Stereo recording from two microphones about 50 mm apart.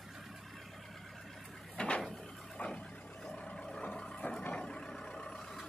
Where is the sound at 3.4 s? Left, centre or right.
Centre.